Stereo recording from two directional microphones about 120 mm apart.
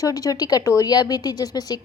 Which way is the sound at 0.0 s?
30° left (ahead or behind).